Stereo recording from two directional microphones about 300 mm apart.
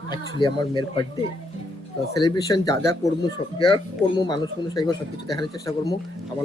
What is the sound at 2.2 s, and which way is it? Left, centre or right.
Speech, centre.